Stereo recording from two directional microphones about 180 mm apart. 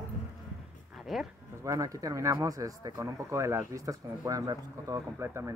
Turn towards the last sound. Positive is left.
turn(degrees=-15)  # may be behind; listen again after turning